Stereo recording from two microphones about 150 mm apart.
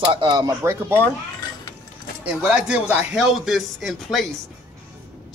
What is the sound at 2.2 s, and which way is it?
A man's voice, 5° right (ahead or behind).